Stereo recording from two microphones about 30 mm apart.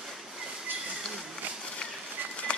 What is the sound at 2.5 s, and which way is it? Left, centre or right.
Run, left.